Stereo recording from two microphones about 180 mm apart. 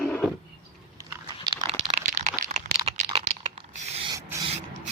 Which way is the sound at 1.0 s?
25° right (ahead or behind).